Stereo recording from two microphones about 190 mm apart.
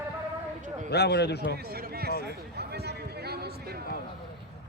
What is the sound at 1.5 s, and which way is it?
Speech, 55° right (ahead or behind).